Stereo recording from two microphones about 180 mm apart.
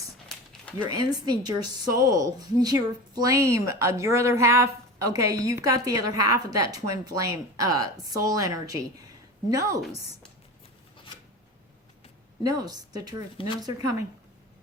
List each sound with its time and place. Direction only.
0.3 s a sound: 5° left (ahead or behind)
0.9 s a woman's voice: 20° right (ahead or behind)
12.4 s a woman's voice: 20° right (ahead or behind)